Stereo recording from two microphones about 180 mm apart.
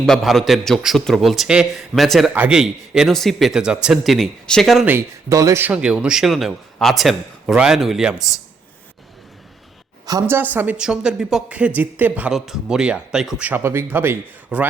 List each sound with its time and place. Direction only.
0.0 s a man's voice: centre (ahead or behind)
4.9 s a man's voice: 15° right (ahead or behind)
10.1 s speech: 15° right (ahead or behind)